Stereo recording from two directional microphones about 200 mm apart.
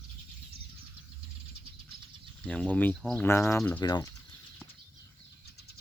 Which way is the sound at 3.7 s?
20° left (ahead or behind).